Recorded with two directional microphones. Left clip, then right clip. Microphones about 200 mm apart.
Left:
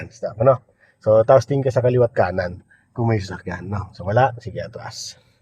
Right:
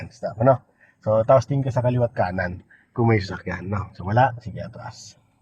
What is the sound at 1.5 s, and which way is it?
Speech, 50° left (ahead or behind).